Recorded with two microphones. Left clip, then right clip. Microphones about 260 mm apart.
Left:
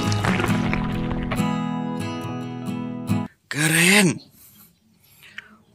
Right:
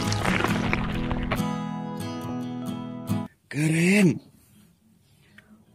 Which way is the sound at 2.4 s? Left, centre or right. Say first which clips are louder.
Left 3 dB; centre.